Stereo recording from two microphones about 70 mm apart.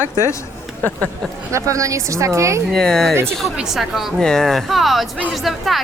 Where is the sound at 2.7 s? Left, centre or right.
Centre.